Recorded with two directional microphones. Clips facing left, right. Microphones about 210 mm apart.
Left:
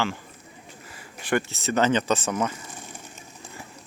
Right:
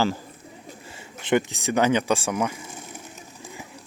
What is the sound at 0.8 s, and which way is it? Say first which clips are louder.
Speech: right 2 dB; 25° right (ahead or behind).